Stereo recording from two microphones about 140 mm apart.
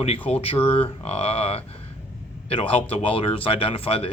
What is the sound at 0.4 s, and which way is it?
Speech, 45° left (ahead or behind).